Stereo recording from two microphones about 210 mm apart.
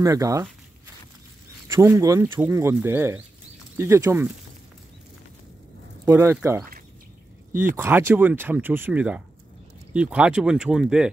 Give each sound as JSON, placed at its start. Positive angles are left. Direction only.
{"t": 0.0, "sound": "speech", "side_deg": -15}
{"t": 1.7, "sound": "speech", "side_deg": -15}
{"t": 6.0, "sound": "speech", "side_deg": -10}
{"t": 7.7, "sound": "speech", "side_deg": -10}